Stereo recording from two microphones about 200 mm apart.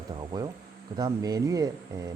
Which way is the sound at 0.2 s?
20° right (ahead or behind).